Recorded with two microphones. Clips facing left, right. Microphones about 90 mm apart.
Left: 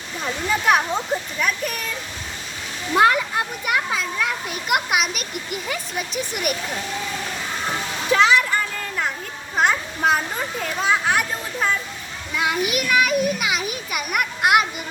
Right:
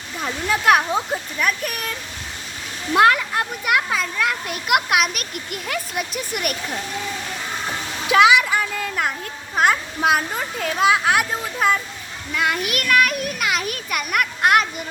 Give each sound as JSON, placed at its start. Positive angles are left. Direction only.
{"t": 0.4, "sound": "a child's voice", "side_deg": 0}
{"t": 2.9, "sound": "a child's voice", "side_deg": 0}
{"t": 8.0, "sound": "a sound", "side_deg": -10}
{"t": 9.6, "sound": "a child's voice", "side_deg": -5}